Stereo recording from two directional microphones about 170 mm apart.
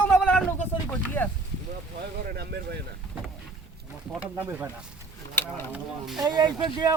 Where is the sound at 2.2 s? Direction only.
70° right (ahead or behind).